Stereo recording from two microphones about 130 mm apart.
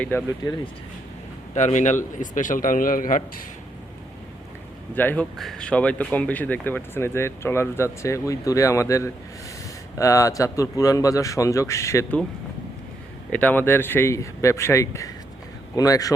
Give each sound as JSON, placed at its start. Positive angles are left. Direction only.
{"t": 0.0, "sound": "speech", "side_deg": 10}
{"t": 1.5, "sound": "a man's voice", "side_deg": 65}
{"t": 4.9, "sound": "speech", "side_deg": 15}
{"t": 5.4, "sound": "speech", "side_deg": 5}
{"t": 13.3, "sound": "speech", "side_deg": 15}